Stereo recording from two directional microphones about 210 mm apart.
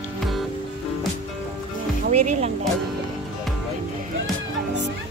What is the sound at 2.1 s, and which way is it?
Speech, 35° right (ahead or behind).